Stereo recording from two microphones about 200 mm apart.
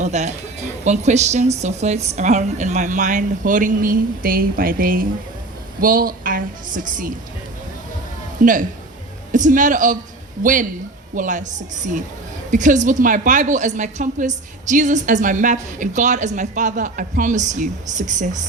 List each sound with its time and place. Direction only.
0.0 s a woman's voice: 35° right (ahead or behind)
9.3 s a woman's voice: 40° right (ahead or behind)